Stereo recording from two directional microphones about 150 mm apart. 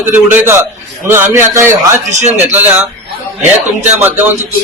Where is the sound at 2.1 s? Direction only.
50° right (ahead or behind).